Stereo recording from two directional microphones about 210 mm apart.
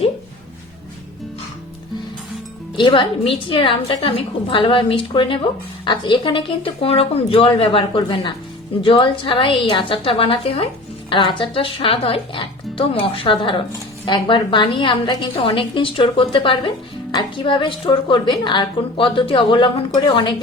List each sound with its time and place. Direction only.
2.7 s speech: 25° left (ahead or behind)